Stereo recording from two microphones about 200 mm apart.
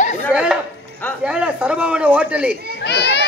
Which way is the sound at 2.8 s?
60° left (ahead or behind).